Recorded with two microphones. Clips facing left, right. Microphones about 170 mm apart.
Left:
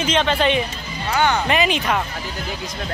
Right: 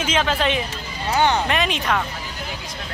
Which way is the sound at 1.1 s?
30° right (ahead or behind).